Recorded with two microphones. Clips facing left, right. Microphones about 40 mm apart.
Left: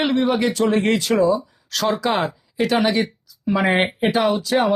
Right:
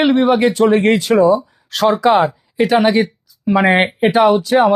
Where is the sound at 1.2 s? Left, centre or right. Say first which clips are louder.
Right 6 dB; right.